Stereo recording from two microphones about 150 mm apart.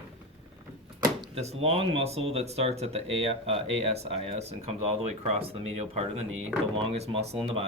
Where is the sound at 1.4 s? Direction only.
45° right (ahead or behind).